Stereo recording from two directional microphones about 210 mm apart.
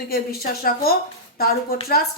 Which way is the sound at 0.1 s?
45° left (ahead or behind).